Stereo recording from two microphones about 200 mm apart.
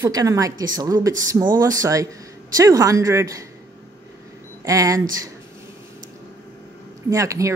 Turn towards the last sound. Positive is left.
turn(degrees=-15)  # may be behind; listen again after turning